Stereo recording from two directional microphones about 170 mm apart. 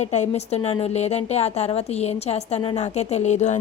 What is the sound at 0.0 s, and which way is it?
A woman's voice, 40° left (ahead or behind).